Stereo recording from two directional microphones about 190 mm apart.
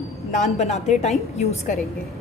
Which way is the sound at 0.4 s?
35° left (ahead or behind).